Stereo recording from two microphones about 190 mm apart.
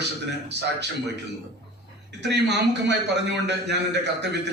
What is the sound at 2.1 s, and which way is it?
A man's voice, 65° right (ahead or behind).